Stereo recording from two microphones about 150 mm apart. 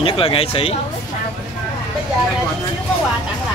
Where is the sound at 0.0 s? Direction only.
35° left (ahead or behind).